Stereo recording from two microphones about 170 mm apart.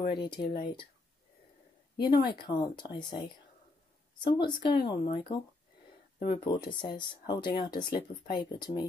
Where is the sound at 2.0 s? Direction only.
25° left (ahead or behind).